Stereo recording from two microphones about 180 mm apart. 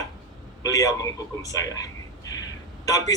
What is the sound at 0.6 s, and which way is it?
A man's voice, 20° left (ahead or behind).